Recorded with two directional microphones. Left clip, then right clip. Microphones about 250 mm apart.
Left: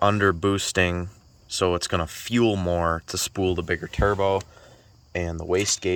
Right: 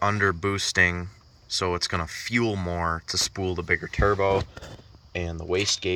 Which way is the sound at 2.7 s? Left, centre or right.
Centre.